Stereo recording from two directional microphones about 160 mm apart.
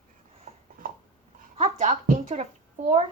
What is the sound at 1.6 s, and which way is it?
Music, 50° right (ahead or behind).